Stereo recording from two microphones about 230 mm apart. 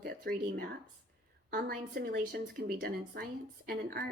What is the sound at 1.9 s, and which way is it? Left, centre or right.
Speech, right.